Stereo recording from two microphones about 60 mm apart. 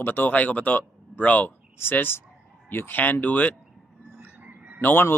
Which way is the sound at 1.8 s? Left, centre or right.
Left.